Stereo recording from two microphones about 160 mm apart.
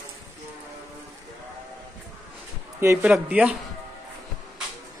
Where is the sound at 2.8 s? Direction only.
15° right (ahead or behind).